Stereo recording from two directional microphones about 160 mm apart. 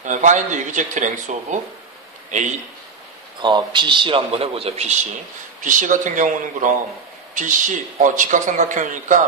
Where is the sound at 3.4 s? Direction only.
30° right (ahead or behind).